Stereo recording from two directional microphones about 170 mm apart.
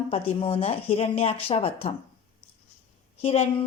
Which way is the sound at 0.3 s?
35° left (ahead or behind).